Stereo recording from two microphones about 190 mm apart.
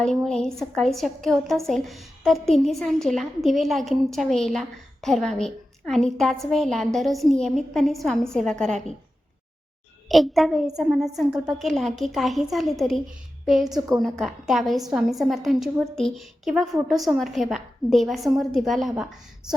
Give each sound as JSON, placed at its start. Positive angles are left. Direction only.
{"t": 0.3, "sound": "a woman's voice", "side_deg": 5}
{"t": 10.1, "sound": "a woman's voice", "side_deg": 0}
{"t": 13.7, "sound": "a woman's voice", "side_deg": -20}
{"t": 14.0, "sound": "a woman's voice", "side_deg": 0}